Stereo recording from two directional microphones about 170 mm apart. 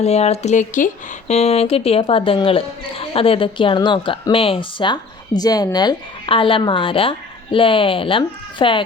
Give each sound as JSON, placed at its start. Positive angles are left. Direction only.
{"t": 0.0, "sound": "a woman's voice", "side_deg": 40}